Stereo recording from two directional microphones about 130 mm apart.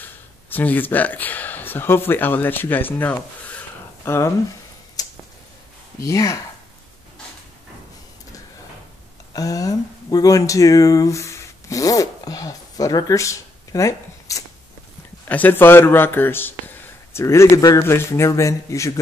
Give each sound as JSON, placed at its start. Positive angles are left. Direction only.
{"t": 0.0, "sound": "speech", "side_deg": 15}
{"t": 5.0, "sound": "a sound", "side_deg": 30}
{"t": 6.0, "sound": "speech", "side_deg": 25}
{"t": 9.3, "sound": "speech", "side_deg": 25}
{"t": 15.2, "sound": "a man's voice", "side_deg": 15}